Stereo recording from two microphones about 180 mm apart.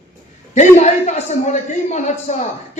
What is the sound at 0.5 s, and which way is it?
A man's voice, 40° left (ahead or behind).